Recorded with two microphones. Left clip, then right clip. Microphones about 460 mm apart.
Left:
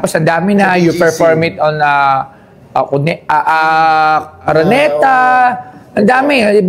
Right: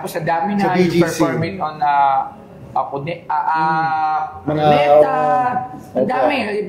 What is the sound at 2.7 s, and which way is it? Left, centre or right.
A man's voice, left.